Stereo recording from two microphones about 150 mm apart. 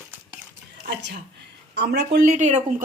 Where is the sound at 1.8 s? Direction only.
90° right.